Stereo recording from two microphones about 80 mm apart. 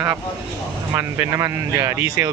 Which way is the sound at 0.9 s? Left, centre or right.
Right.